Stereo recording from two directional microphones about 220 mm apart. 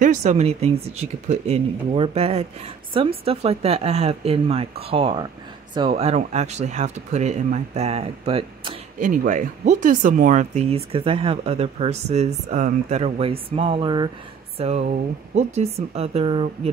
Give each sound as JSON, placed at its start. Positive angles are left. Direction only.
{"t": 0.0, "sound": "speech", "side_deg": -35}
{"t": 9.1, "sound": "speech", "side_deg": -35}